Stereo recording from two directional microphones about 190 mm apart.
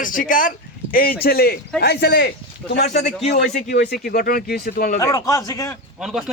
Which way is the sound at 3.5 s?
40° left (ahead or behind).